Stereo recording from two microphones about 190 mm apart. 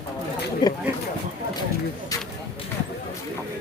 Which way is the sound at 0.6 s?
20° left (ahead or behind).